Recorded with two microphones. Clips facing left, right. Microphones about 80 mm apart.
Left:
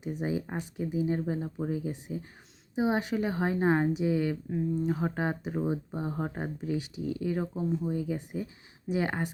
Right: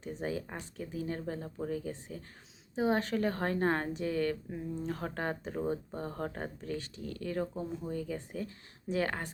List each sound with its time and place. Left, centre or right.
0.0 s speech: centre